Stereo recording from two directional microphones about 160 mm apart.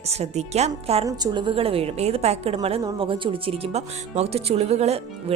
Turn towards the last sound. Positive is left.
turn(degrees=-40)  # may be behind; listen again after turning